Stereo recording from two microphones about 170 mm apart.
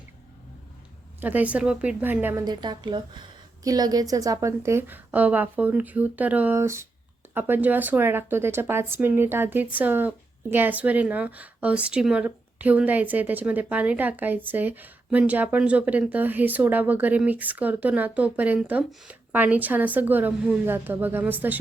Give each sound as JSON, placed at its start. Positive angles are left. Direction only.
{"t": 1.2, "sound": "speech", "side_deg": -10}
{"t": 2.4, "sound": "speech", "side_deg": -25}